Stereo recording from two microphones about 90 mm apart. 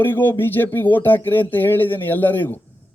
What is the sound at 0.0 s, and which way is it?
A man's voice, 25° left (ahead or behind).